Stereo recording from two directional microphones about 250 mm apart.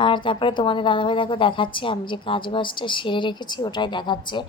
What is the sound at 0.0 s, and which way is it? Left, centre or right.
A woman's voice, centre.